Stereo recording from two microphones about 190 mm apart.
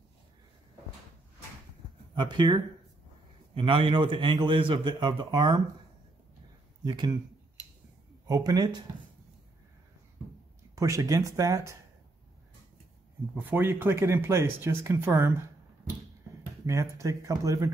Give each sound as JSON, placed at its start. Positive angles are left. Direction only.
{"t": 2.1, "sound": "a man's voice", "side_deg": -25}
{"t": 6.8, "sound": "speech", "side_deg": -20}
{"t": 8.3, "sound": "a man's voice", "side_deg": -20}
{"t": 10.8, "sound": "speech", "side_deg": -15}
{"t": 13.3, "sound": "speech", "side_deg": -10}
{"t": 16.6, "sound": "speech", "side_deg": -15}